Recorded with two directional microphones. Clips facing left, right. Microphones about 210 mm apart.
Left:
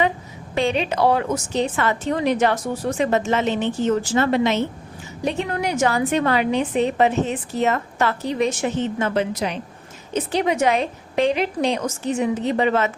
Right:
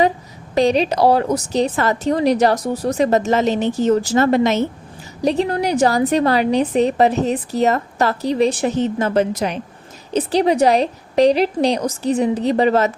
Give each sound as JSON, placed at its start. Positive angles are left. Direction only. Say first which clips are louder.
{"t": 0.5, "sound": "a woman's voice", "louder": "right 5 dB", "side_deg": -40}
{"t": 10.1, "sound": "a woman's voice", "louder": "right 5 dB", "side_deg": -35}